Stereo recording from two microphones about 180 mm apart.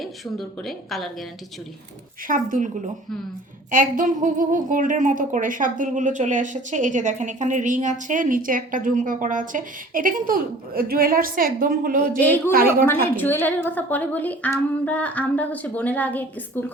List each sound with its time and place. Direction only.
0.0 s a woman's voice: centre (ahead or behind)
2.2 s speech: 50° right (ahead or behind)
12.9 s a woman's voice: 10° left (ahead or behind)